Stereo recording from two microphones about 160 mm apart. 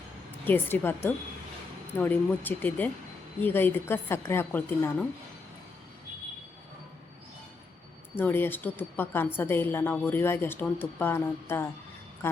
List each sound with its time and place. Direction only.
0.3 s a woman's voice: 10° left (ahead or behind)
8.1 s a woman's voice: 10° left (ahead or behind)